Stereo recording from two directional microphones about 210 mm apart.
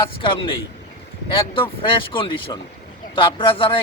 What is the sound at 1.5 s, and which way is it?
Speech, 25° left (ahead or behind).